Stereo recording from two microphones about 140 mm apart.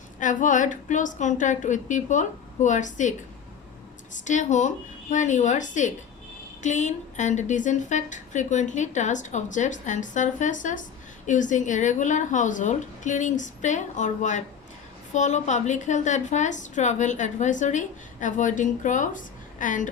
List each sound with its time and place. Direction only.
0.2 s a woman's voice: 65° left (ahead or behind)